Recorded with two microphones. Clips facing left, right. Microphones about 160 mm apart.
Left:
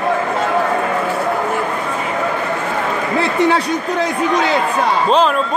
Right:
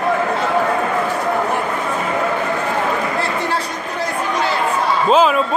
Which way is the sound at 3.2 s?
70° left (ahead or behind).